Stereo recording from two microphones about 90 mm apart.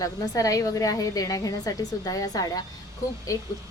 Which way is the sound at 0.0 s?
40° left (ahead or behind).